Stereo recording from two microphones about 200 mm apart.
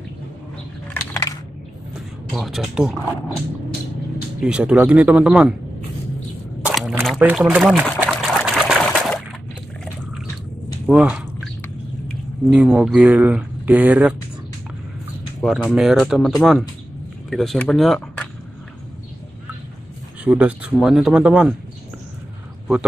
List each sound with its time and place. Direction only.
1.1 s a sound: 15° left (ahead or behind)
2.3 s speech: centre (ahead or behind)
4.4 s speech: 5° right (ahead or behind)
6.6 s a sound: 5° right (ahead or behind)
7.1 s speech: 5° right (ahead or behind)
8.0 s trickle: centre (ahead or behind)
10.9 s drip: 5° right (ahead or behind)
12.1 s speech: centre (ahead or behind)
15.4 s speech: centre (ahead or behind)
20.2 s speech: 5° right (ahead or behind)